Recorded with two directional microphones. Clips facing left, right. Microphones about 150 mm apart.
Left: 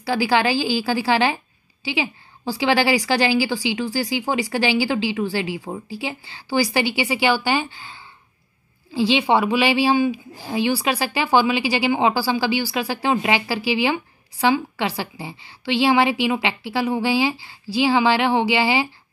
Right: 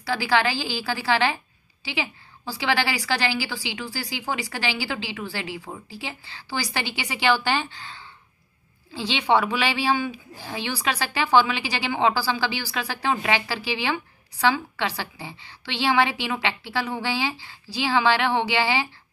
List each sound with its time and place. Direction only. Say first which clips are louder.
0.0 s speech: left 4 dB; 15° left (ahead or behind)
2.5 s speech: left 6 dB; 15° left (ahead or behind)
5.3 s speech: left 7 dB; 15° left (ahead or behind)